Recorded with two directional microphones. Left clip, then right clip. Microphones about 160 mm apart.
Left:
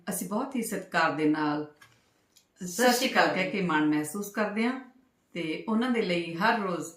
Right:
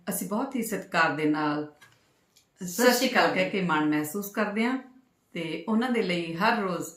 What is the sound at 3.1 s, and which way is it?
Speech, 15° right (ahead or behind).